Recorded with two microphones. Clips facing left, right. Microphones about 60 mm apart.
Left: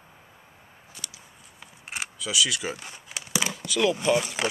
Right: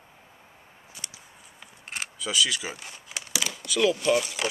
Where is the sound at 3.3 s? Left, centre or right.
Left.